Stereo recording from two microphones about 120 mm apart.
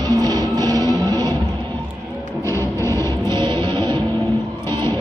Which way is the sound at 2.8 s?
25° left (ahead or behind).